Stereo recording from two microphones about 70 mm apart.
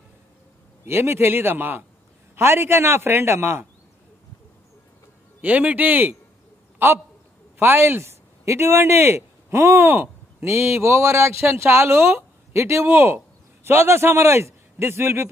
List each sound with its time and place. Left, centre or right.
0.8 s a man's voice: right
5.4 s speech: right
7.5 s a man's voice: right